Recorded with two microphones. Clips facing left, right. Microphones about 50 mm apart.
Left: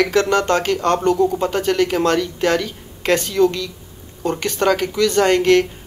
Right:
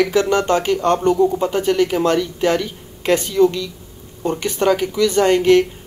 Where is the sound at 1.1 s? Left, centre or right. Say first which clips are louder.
Right 1 dB; centre.